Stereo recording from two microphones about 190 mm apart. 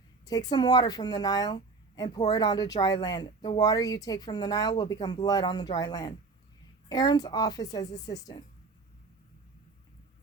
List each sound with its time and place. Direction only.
0.3 s a woman's voice: 20° left (ahead or behind)